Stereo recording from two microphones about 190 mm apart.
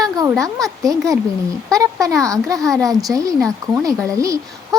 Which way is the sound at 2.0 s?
15° right (ahead or behind).